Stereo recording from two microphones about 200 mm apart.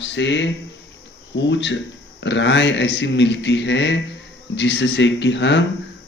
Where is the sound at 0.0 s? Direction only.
65° left (ahead or behind).